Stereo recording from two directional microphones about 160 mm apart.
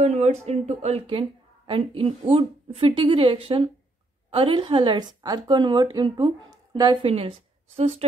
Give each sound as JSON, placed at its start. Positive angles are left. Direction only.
{"t": 0.0, "sound": "a woman's voice", "side_deg": -45}